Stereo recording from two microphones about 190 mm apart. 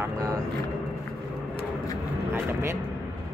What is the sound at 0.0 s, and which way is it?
Vehicle, 15° right (ahead or behind).